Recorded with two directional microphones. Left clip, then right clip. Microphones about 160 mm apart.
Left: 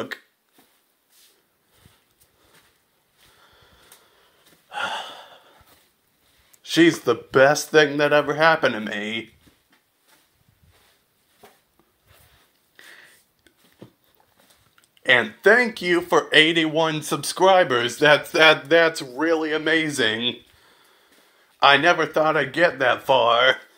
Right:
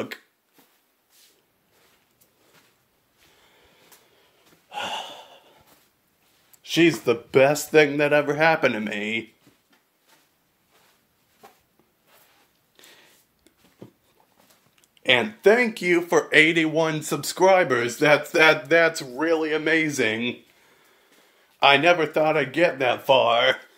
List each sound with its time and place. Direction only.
4.6 s gasp: 15° right (ahead or behind)
6.6 s speech: 10° right (ahead or behind)
8.3 s a man's voice: 20° right (ahead or behind)
12.7 s a sound: 20° right (ahead or behind)
15.4 s speech: 10° right (ahead or behind)
21.5 s speech: 15° right (ahead or behind)